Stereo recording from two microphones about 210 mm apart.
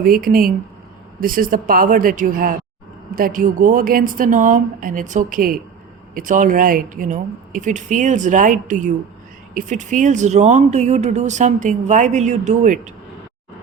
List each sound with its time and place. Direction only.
0.0 s speech: 45° right (ahead or behind)